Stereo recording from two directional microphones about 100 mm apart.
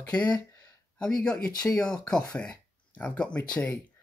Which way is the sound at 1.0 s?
10° left (ahead or behind).